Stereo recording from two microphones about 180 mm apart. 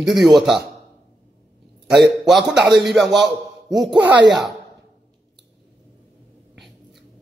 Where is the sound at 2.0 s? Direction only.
Centre (ahead or behind).